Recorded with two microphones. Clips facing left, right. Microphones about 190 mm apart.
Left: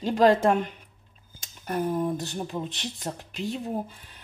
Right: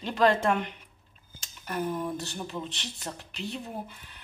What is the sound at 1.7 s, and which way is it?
Speech, 40° left (ahead or behind).